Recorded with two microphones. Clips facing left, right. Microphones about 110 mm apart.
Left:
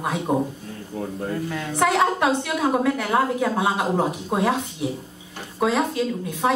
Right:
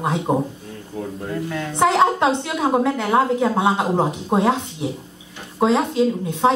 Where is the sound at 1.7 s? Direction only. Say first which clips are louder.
Right 3 dB; 25° right (ahead or behind).